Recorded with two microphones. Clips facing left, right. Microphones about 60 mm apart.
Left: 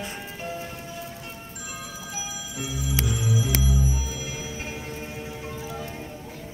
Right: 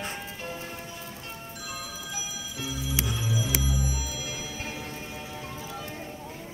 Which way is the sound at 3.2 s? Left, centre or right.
Left.